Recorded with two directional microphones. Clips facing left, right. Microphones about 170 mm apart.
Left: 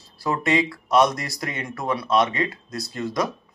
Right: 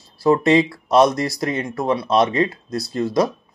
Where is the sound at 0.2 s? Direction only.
30° right (ahead or behind).